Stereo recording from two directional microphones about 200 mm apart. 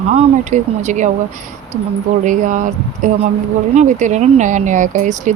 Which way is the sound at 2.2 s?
40° right (ahead or behind).